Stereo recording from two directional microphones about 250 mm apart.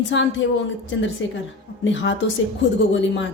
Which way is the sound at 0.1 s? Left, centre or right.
Left.